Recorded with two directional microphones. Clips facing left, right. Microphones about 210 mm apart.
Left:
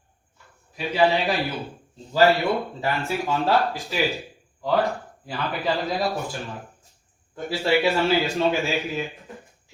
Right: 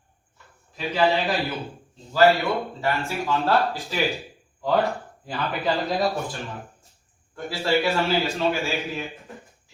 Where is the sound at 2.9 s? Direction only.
15° left (ahead or behind).